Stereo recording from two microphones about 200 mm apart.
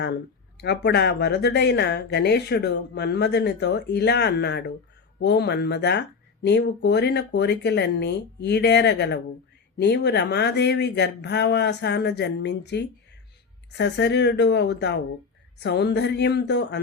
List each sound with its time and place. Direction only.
0.6 s speech: 55° left (ahead or behind)